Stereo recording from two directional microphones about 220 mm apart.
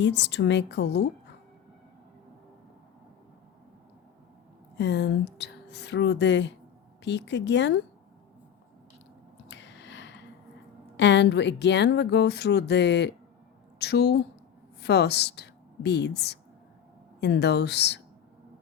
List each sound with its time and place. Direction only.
0.0 s speech: 55° left (ahead or behind)
4.8 s speech: 50° left (ahead or behind)
9.5 s a sound: 55° left (ahead or behind)
10.9 s a woman's voice: 50° left (ahead or behind)